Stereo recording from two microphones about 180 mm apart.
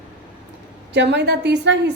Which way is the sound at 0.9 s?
70° right (ahead or behind).